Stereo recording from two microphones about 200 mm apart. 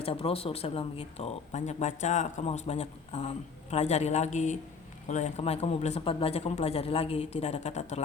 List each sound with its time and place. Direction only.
0.0 s speech: 30° left (ahead or behind)